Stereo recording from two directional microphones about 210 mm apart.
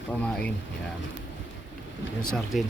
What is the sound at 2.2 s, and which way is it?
Speech, centre (ahead or behind).